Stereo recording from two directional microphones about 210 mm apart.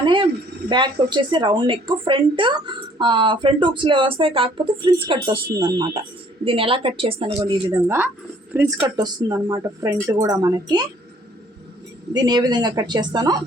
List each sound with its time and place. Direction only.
0.0 s a sound: 25° right (ahead or behind)
0.7 s speech: 20° right (ahead or behind)
6.4 s speech: 25° right (ahead or behind)
12.1 s speech: 20° right (ahead or behind)